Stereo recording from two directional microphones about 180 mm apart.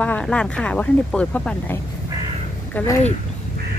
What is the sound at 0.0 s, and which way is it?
Speech, 5° left (ahead or behind).